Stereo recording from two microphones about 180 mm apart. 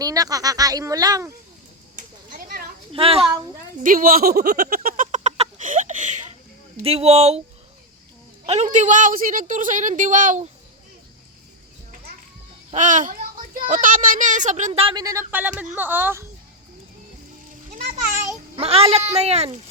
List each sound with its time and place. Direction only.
0.0 s speech: 20° right (ahead or behind)
2.0 s a sound: 50° right (ahead or behind)
2.9 s speech: 30° right (ahead or behind)
3.8 s a sound: 50° right (ahead or behind)
6.8 s speech: 35° right (ahead or behind)
8.4 s a child's voice: 40° right (ahead or behind)
12.7 s a child's voice: 45° right (ahead or behind)
14.9 s speech: 15° right (ahead or behind)
18.5 s speech: 35° right (ahead or behind)